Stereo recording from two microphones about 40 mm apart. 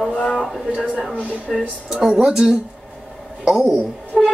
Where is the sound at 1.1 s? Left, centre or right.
Right.